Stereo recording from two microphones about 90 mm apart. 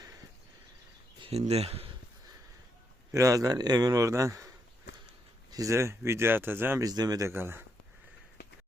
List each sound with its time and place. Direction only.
1.2 s speech: 90° right
3.1 s a man's voice: 40° right (ahead or behind)
5.5 s speech: 40° right (ahead or behind); by 6.8 s 25° right (ahead or behind)
6.8 s speech: 45° right (ahead or behind)
7.3 s speech: 25° right (ahead or behind)